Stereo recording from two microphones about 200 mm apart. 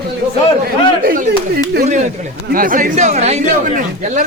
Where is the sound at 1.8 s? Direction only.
35° right (ahead or behind).